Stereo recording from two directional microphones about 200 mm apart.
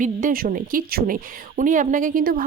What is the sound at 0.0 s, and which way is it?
Speech, 40° right (ahead or behind).